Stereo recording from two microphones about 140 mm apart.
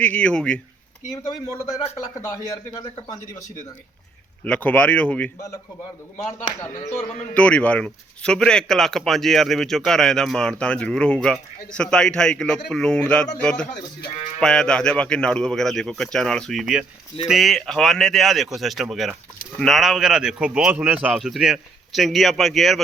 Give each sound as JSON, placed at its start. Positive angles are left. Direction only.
{"t": 0.0, "sound": "speech", "side_deg": 10}
{"t": 1.1, "sound": "speech", "side_deg": 25}
{"t": 4.4, "sound": "speech", "side_deg": 10}
{"t": 7.3, "sound": "a man's voice", "side_deg": 10}